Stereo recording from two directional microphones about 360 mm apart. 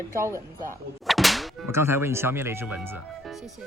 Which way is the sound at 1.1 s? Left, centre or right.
Centre.